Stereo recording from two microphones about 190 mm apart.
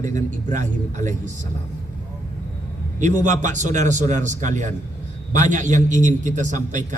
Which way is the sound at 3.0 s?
40° right (ahead or behind).